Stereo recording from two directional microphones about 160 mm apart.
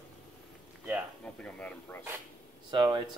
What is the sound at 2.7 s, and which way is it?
Speech, 30° right (ahead or behind).